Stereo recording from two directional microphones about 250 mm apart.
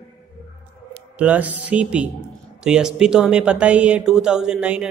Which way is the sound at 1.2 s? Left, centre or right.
Centre.